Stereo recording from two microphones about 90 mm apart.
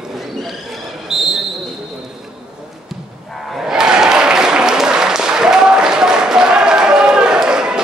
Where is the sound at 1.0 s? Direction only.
5° right (ahead or behind).